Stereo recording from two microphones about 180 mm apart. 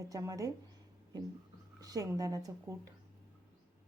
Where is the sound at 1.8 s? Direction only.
20° right (ahead or behind).